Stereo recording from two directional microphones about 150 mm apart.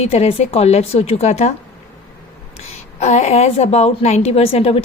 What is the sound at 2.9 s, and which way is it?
A woman's voice, 50° left (ahead or behind).